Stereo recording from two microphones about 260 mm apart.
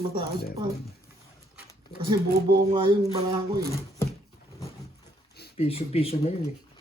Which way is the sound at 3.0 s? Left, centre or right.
Centre.